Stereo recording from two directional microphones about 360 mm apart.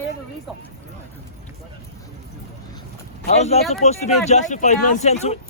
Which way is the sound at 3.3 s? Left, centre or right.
Centre.